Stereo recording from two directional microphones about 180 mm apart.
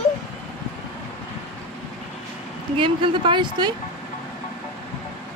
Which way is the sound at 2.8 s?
25° right (ahead or behind).